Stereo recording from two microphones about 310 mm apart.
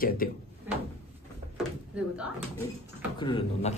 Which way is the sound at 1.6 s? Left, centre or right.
Centre.